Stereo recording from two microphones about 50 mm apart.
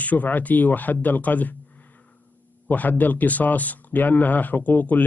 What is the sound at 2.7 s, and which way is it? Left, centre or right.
Speech, left.